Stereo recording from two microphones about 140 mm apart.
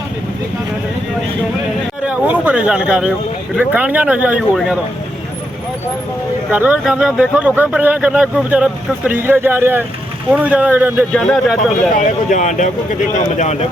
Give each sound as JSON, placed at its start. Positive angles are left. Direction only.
{"t": 2.0, "sound": "speech", "side_deg": -10}
{"t": 6.5, "sound": "speech", "side_deg": -10}
{"t": 11.1, "sound": "speech", "side_deg": 0}
{"t": 11.9, "sound": "speech", "side_deg": 60}